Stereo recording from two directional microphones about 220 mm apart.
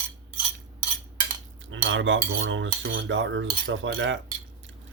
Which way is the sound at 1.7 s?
60° right (ahead or behind).